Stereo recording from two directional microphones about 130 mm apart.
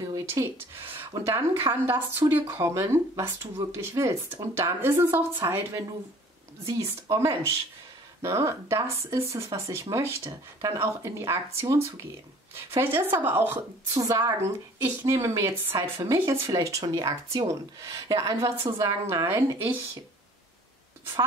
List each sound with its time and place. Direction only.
0.1 s a sound: 25° right (ahead or behind)
1.1 s a woman's voice: 20° right (ahead or behind)
12.5 s a woman's voice: 20° right (ahead or behind)
13.9 s speech: 25° right (ahead or behind)